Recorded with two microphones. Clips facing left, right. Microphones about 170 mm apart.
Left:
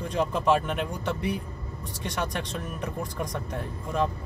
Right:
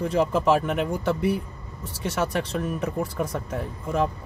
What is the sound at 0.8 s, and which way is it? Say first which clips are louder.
Speech: right 5 dB; 60° right (ahead or behind).